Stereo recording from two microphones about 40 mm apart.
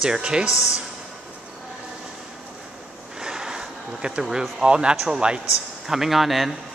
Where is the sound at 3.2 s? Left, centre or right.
Centre.